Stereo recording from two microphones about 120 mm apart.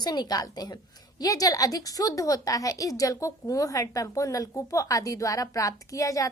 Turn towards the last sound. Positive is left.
turn(degrees=25)  # may be behind; listen again after turning